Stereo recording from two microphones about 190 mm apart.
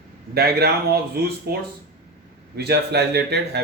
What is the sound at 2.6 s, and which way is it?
Speech, 60° right (ahead or behind).